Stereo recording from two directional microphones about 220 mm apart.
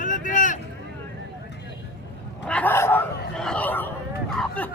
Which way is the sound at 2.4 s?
5° left (ahead or behind).